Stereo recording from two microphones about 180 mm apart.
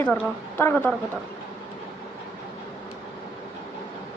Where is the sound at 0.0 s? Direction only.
10° left (ahead or behind).